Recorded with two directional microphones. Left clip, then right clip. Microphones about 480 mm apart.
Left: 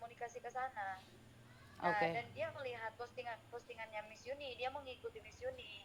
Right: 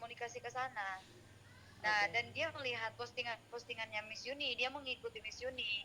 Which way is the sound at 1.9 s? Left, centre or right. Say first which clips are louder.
Right 3 dB; right.